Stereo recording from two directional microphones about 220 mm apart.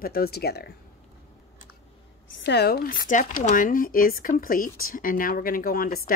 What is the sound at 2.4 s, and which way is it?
Speech, 50° left (ahead or behind).